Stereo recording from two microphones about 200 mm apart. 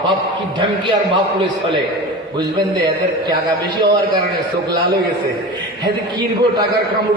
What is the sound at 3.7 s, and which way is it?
Speech, 20° right (ahead or behind).